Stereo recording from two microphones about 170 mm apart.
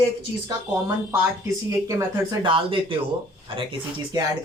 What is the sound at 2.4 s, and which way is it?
Speech, 30° right (ahead or behind).